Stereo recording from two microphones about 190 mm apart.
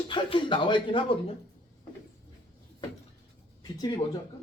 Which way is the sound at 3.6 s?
20° left (ahead or behind).